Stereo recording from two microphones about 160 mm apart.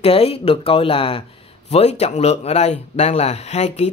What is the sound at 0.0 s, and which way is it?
A woman's voice, 40° left (ahead or behind).